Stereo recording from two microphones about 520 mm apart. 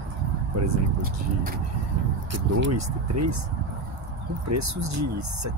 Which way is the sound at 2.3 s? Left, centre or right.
Right.